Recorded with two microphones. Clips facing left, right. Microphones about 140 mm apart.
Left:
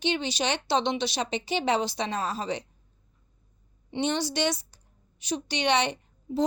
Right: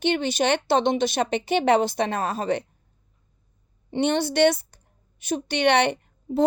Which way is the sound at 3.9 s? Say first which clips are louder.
Right 6 dB; 55° right (ahead or behind).